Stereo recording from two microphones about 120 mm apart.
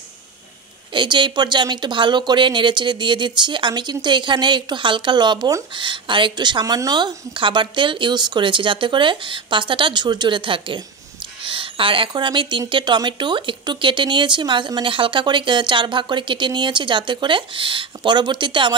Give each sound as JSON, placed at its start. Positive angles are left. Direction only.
{"t": 0.9, "sound": "speech", "side_deg": -40}